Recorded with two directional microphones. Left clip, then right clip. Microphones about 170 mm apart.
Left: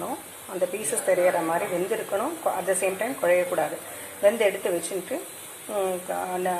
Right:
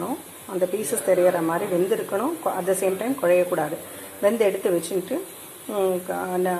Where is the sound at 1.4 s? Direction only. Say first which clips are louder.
Right 2 dB; 20° right (ahead or behind).